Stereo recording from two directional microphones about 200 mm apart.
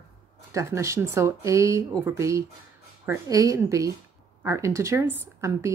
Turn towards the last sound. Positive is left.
turn(degrees=-15)  # may be behind; listen again after turning